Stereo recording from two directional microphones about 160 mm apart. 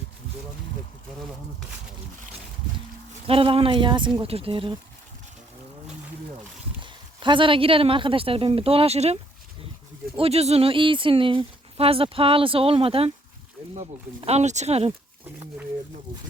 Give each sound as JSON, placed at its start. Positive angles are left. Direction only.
{"t": 3.2, "sound": "speech", "side_deg": -35}
{"t": 6.8, "sound": "speech", "side_deg": -30}
{"t": 10.2, "sound": "speech", "side_deg": -40}
{"t": 14.2, "sound": "speech", "side_deg": -40}